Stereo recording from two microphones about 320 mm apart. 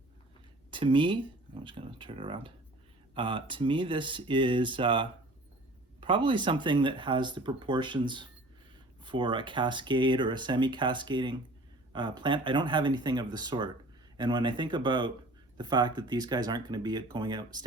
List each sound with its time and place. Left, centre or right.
0.7 s speech: centre